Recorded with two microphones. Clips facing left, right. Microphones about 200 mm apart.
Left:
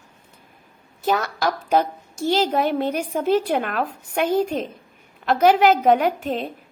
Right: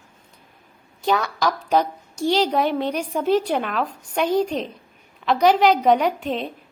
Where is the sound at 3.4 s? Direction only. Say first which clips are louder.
Left 1 dB; 10° left (ahead or behind).